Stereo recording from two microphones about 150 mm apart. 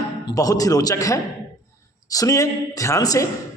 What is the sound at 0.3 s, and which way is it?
A man's voice, 25° left (ahead or behind).